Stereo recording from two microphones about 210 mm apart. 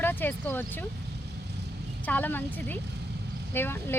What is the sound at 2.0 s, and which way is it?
Speech, 10° left (ahead or behind).